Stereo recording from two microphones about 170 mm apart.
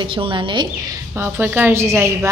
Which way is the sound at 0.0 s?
30° right (ahead or behind).